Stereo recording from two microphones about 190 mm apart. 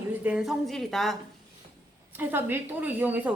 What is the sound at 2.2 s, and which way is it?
A woman's voice, 10° right (ahead or behind).